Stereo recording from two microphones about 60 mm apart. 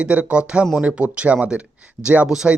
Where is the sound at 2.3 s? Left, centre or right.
Centre.